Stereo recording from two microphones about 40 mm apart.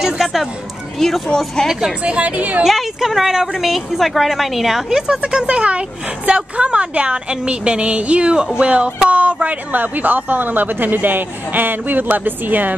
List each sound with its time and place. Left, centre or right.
0.0 s a sound: centre
0.9 s speech: centre
2.0 s speech: right
2.6 s a woman's voice: centre
4.8 s a woman's voice: centre; by 12.7 s right